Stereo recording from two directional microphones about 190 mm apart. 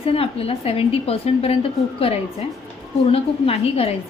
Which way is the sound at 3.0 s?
30° left (ahead or behind).